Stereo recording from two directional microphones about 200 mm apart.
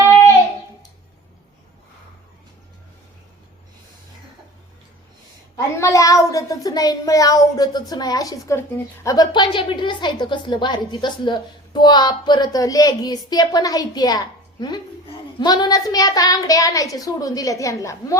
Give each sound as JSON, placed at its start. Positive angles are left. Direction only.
{"t": 5.7, "sound": "a child's voice", "side_deg": 15}